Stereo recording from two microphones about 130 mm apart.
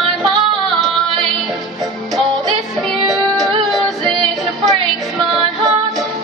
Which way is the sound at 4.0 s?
40° right (ahead or behind).